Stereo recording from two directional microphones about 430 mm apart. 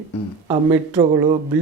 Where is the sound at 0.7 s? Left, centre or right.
Centre.